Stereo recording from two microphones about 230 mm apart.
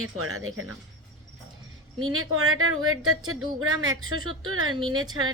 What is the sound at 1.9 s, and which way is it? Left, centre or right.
A woman's voice, right.